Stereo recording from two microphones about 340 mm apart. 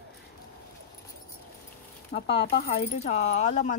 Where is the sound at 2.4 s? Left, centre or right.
Left.